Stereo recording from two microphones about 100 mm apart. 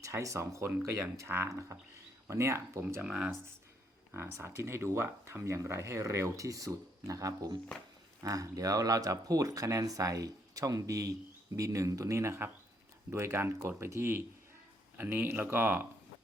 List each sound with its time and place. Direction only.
0.0 s speech: 30° right (ahead or behind)
3.0 s speech: 10° right (ahead or behind)
4.1 s speech: 25° right (ahead or behind)